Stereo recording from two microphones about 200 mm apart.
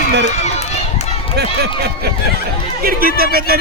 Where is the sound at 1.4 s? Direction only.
55° right (ahead or behind).